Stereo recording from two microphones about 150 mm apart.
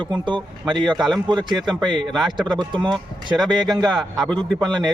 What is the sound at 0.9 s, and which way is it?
Speech, centre (ahead or behind).